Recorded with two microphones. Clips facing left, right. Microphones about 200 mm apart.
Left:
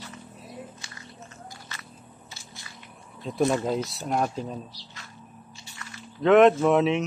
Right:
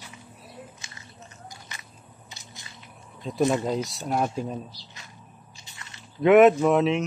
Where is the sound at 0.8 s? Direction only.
20° right (ahead or behind).